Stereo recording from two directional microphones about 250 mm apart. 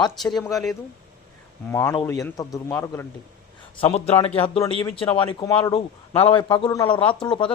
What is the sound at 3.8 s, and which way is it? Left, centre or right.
Speech, left.